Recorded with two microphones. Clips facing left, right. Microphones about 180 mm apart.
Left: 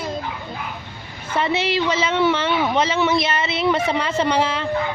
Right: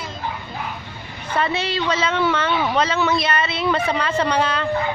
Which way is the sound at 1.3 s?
20° left (ahead or behind).